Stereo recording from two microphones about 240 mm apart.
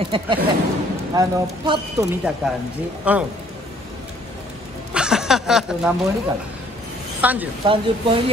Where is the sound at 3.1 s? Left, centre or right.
Centre.